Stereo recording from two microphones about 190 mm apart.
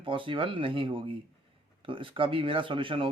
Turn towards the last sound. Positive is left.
turn(degrees=-25)  # may be behind; listen again after turning